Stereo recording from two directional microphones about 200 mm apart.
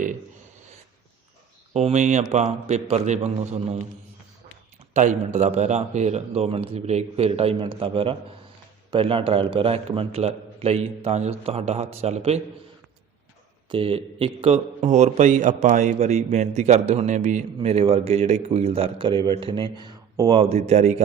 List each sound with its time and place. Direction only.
1.7 s a man's voice: 35° right (ahead or behind)
4.9 s a man's voice: 35° right (ahead or behind)
13.7 s a man's voice: 30° right (ahead or behind)